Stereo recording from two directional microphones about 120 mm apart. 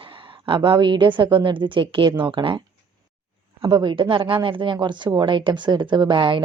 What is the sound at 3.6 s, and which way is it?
Speech, 40° right (ahead or behind).